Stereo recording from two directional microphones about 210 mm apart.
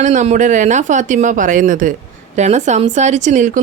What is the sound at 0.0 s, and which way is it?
Speech, 35° right (ahead or behind).